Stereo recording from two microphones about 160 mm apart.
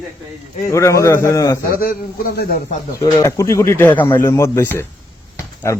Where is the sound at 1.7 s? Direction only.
70° left (ahead or behind).